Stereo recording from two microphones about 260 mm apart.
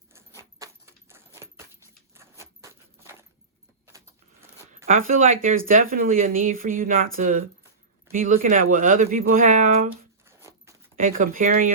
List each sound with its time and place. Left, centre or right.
0.6 s keys jangling: centre
4.9 s speech: right
10.2 s a sound: centre
10.9 s speech: right